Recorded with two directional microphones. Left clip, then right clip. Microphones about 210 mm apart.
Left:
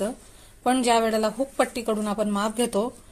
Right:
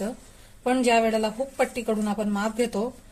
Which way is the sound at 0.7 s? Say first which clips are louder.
Even; 30° left (ahead or behind).